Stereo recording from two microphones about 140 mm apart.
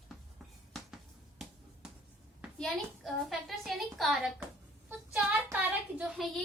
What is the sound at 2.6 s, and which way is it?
A woman's voice, centre (ahead or behind).